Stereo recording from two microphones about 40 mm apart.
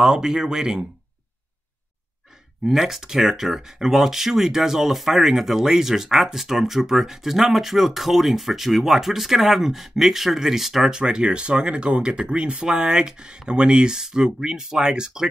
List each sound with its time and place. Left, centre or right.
0.0 s speech: centre
2.6 s speech: centre
11.0 s speech: right